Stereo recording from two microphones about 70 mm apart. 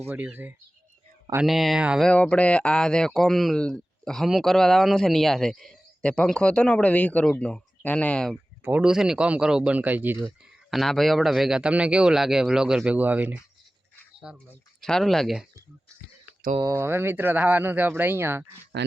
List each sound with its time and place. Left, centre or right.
0.1 s speech: right
1.5 s speech: centre
2.1 s speech: centre
6.0 s speech: centre
8.8 s speech: centre; by 10.2 s right
10.4 s speech: centre
12.8 s speech: right
14.3 s speech: centre
14.8 s speech: centre
16.7 s speech: right